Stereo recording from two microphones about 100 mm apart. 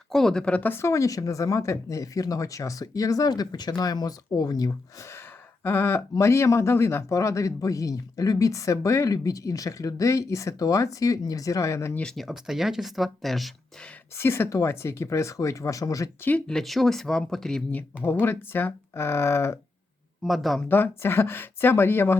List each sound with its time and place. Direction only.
0.1 s speech: 5° left (ahead or behind); by 11.9 s 30° left (ahead or behind)
11.9 s speech: 5° left (ahead or behind)
14.2 s speech: 25° left (ahead or behind)
16.5 s speech: 5° left (ahead or behind)
18.0 s speech: 20° left (ahead or behind)
20.2 s speech: centre (ahead or behind)
20.7 s speech: 20° left (ahead or behind)